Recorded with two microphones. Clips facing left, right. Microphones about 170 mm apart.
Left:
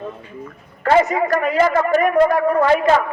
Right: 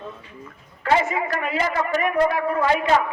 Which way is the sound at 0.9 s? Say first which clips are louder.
Left 6 dB; 45° left (ahead or behind).